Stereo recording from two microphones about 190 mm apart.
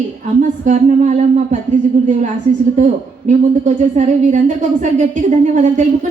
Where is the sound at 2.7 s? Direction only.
40° right (ahead or behind).